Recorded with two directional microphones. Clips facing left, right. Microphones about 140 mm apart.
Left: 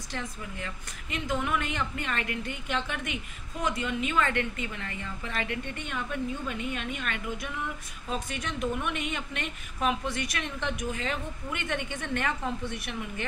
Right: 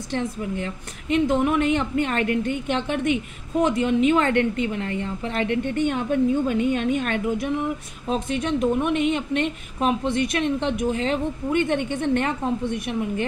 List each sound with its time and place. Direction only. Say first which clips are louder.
0.1 s a woman's voice: right 11 dB; 30° right (ahead or behind)
3.6 s a woman's voice: right 10 dB; 30° right (ahead or behind)